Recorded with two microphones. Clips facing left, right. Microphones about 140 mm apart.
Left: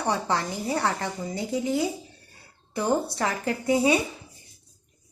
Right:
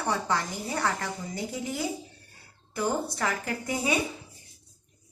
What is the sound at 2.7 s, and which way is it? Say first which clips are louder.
Speech: left 4 dB; 30° left (ahead or behind).